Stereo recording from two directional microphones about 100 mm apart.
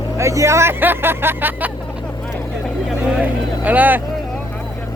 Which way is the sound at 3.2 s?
15° right (ahead or behind).